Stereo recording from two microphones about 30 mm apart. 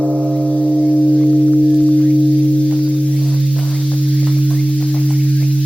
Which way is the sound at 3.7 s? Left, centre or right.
Left.